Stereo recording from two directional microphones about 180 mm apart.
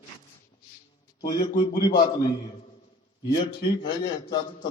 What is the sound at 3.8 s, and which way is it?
Speech, 25° left (ahead or behind).